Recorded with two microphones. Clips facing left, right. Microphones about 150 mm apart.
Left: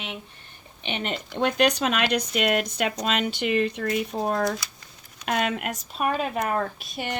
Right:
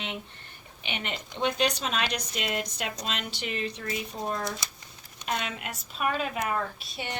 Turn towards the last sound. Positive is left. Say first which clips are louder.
# left 5 dB
turn(degrees=50)  # may be behind; listen again after turning